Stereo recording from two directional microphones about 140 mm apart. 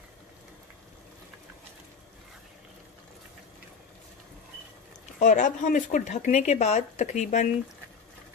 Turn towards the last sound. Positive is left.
turn(degrees=60)  # may be behind; listen again after turning